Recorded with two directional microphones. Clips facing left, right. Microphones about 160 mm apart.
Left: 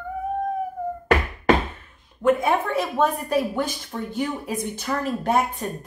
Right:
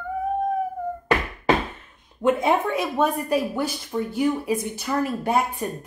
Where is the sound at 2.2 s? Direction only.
20° right (ahead or behind).